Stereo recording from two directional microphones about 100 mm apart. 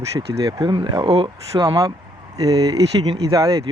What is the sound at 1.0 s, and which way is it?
Speech, 75° right (ahead or behind).